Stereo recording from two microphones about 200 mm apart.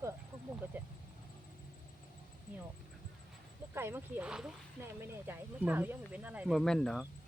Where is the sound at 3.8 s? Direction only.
10° right (ahead or behind).